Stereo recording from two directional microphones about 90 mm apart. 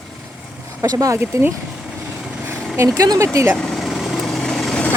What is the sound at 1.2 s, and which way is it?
Speech, 25° right (ahead or behind).